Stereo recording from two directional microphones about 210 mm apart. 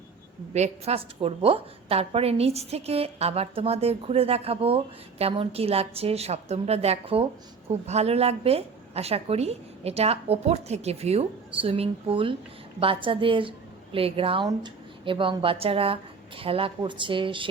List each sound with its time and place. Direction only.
0.5 s a woman's voice: 30° right (ahead or behind)